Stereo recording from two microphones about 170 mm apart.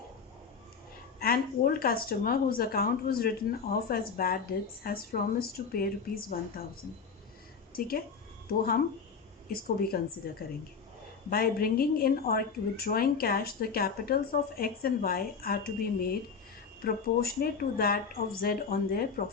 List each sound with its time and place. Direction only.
1.2 s speech: 60° left (ahead or behind)
7.7 s a woman's voice: 60° left (ahead or behind)
11.3 s speech: 60° left (ahead or behind)